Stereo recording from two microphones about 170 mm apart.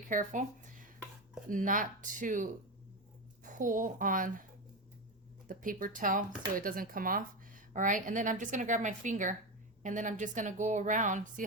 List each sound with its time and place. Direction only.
0.1 s speech: 50° right (ahead or behind)
5.5 s speech: 55° right (ahead or behind)